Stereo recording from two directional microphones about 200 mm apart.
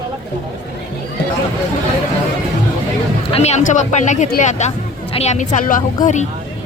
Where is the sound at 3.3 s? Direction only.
30° left (ahead or behind).